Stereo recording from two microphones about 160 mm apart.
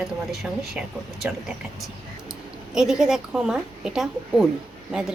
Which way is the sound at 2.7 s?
5° right (ahead or behind).